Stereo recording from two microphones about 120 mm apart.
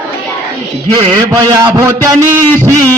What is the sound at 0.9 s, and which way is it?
A man's voice, 30° right (ahead or behind).